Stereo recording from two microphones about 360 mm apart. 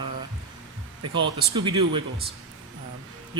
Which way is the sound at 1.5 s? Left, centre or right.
Centre.